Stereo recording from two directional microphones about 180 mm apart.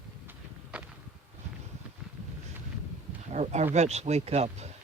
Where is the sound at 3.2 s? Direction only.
40° right (ahead or behind).